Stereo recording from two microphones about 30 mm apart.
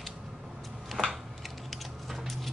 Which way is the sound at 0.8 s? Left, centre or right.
Centre.